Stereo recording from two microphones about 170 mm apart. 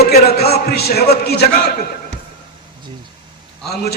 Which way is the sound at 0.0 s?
65° left (ahead or behind).